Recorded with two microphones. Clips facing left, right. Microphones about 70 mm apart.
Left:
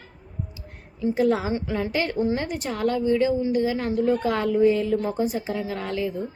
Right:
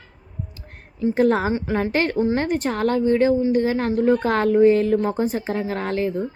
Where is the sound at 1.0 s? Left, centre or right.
Right.